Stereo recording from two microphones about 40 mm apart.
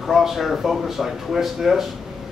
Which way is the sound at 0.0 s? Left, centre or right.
Centre.